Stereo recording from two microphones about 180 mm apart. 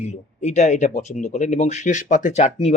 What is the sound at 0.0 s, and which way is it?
Speech, 40° left (ahead or behind).